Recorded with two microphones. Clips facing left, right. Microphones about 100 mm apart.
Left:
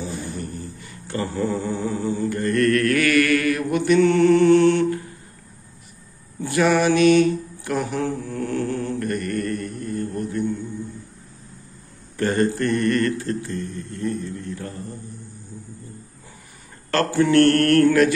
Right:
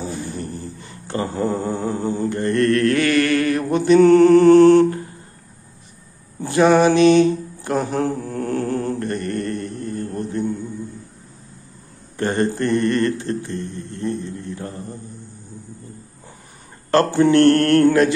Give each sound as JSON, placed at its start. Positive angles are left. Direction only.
{"t": 0.0, "sound": "mantra", "side_deg": -35}
{"t": 6.4, "sound": "mantra", "side_deg": -25}
{"t": 12.2, "sound": "speech", "side_deg": -25}
{"t": 16.9, "sound": "speech", "side_deg": -25}